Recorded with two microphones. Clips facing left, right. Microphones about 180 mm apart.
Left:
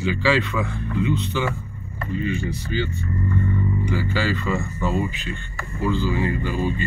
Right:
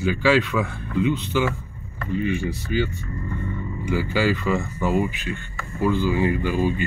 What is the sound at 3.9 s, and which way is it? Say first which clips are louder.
Speech: right 6 dB; 15° right (ahead or behind).